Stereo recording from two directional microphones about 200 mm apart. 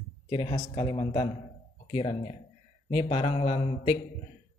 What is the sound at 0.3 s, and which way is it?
Speech, 25° left (ahead or behind).